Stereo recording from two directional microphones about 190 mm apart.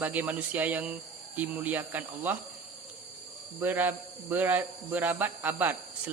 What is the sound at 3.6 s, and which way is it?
A man's voice, 10° right (ahead or behind).